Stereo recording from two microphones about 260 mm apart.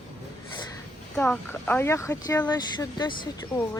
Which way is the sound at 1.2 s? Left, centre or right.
Centre.